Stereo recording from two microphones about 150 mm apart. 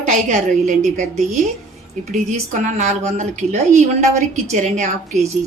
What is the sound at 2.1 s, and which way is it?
A woman's voice, 55° right (ahead or behind).